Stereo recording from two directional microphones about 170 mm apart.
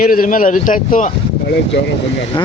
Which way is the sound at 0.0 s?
55° left (ahead or behind).